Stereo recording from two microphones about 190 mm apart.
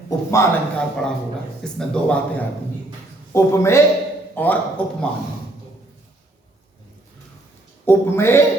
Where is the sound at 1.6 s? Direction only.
5° left (ahead or behind).